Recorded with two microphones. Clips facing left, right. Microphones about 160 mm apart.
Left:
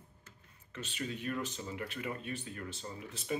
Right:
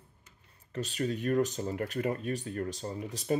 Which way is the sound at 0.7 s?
40° right (ahead or behind).